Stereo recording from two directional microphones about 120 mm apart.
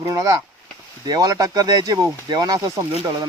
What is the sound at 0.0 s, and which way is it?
Speech, 30° right (ahead or behind).